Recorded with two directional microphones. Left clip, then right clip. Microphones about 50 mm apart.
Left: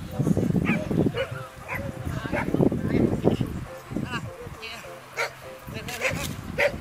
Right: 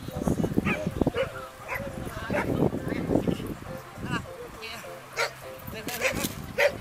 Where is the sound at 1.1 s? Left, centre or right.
Right.